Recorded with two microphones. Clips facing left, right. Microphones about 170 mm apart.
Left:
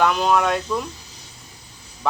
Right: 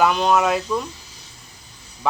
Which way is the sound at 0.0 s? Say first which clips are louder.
Right 1 dB; centre (ahead or behind).